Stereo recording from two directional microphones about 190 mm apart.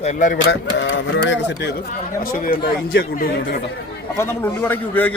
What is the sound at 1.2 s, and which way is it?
Speech, 65° left (ahead or behind).